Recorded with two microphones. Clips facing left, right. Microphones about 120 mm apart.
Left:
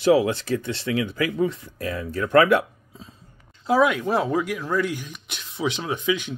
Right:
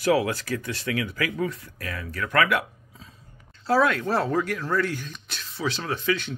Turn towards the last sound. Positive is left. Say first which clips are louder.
# left 2 dB
turn(degrees=10)  # may be behind; listen again after turning